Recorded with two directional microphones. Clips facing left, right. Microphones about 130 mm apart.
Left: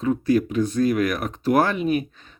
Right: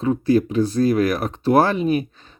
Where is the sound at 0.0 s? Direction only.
30° right (ahead or behind).